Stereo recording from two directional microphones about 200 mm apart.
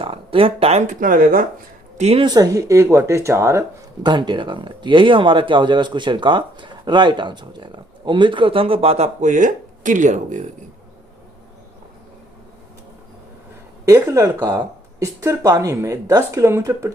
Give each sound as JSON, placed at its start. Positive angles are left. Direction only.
{"t": 0.0, "sound": "speech", "side_deg": -25}
{"t": 2.0, "sound": "speech", "side_deg": -30}
{"t": 13.8, "sound": "speech", "side_deg": -15}